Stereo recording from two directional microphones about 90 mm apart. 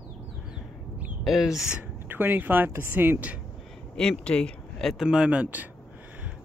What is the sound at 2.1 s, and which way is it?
Speech, 20° right (ahead or behind).